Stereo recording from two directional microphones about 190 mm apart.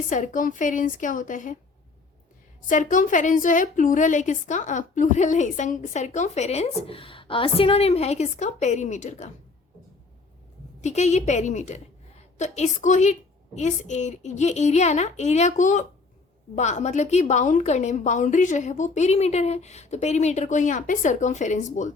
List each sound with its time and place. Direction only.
0.1 s a woman's voice: 40° left (ahead or behind)
2.6 s a woman's voice: 40° left (ahead or behind)
10.8 s a woman's voice: 35° left (ahead or behind)